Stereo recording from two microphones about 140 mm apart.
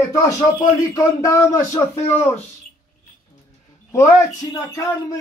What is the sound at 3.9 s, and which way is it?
A man's voice, 20° left (ahead or behind).